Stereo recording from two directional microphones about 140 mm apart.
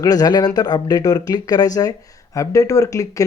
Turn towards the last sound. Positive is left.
turn(degrees=25)  # may be behind; listen again after turning